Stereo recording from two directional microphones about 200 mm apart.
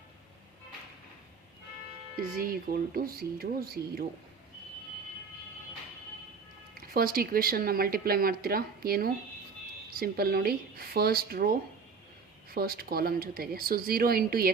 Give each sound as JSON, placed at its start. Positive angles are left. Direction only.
{"t": 2.3, "sound": "speech", "side_deg": -45}
{"t": 6.7, "sound": "speech", "side_deg": -45}